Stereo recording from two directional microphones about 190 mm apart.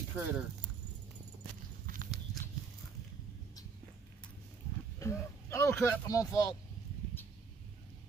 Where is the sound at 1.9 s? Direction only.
45° right (ahead or behind).